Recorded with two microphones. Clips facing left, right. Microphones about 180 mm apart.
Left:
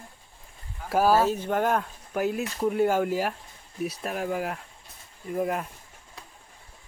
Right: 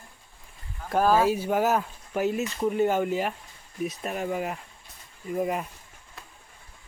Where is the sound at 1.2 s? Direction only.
10° right (ahead or behind).